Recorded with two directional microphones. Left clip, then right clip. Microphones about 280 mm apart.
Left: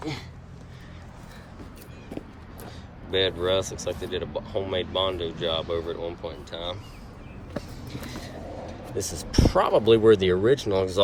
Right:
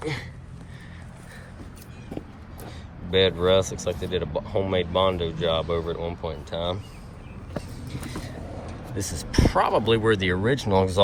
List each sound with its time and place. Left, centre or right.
0.0 s speech: centre
2.6 s speech: centre
7.5 s vehicle: centre
9.0 s speech: centre